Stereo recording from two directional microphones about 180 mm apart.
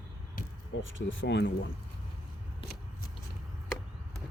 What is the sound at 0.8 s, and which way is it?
Speech, 90° left.